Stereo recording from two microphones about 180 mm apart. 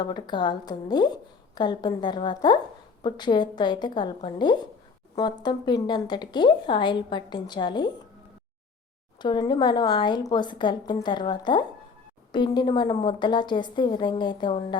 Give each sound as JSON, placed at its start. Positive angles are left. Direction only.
{"t": 0.0, "sound": "speech", "side_deg": 25}
{"t": 9.2, "sound": "speech", "side_deg": 25}